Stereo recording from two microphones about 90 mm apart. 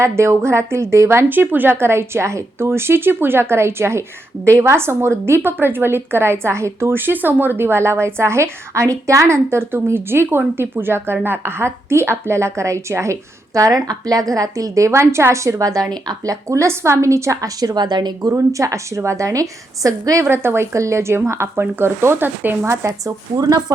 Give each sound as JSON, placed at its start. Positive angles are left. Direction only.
{"t": 0.0, "sound": "a woman's voice", "side_deg": -30}
{"t": 20.2, "sound": "a woman's voice", "side_deg": -25}
{"t": 22.9, "sound": "a woman's voice", "side_deg": -45}